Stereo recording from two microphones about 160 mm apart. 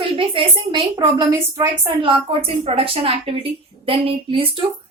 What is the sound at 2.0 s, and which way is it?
Speech, 35° right (ahead or behind).